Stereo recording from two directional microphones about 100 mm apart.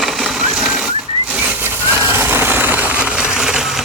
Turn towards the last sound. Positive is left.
turn(degrees=-5)  # may be behind; listen again after turning